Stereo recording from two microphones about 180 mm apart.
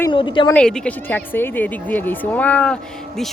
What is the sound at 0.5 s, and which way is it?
Speech, 5° left (ahead or behind).